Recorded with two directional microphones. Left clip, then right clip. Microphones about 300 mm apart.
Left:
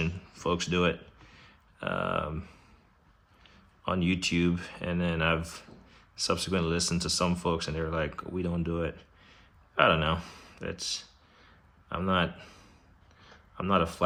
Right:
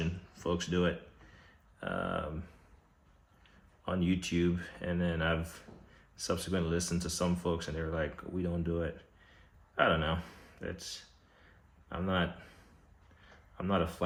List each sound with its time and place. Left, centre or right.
0.0 s a sound: left
1.8 s speech: left
3.8 s speech: left
13.6 s speech: left